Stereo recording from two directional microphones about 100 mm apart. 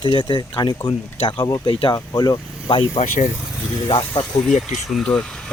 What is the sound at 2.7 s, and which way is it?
Speech, 60° left (ahead or behind).